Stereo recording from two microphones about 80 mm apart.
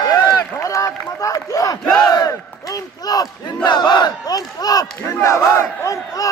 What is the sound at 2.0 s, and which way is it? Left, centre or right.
Battle cry, left.